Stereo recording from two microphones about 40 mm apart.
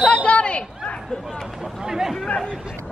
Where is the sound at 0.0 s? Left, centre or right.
Left.